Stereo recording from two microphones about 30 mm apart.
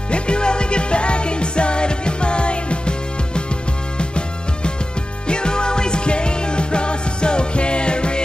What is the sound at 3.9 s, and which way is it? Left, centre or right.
Music, left.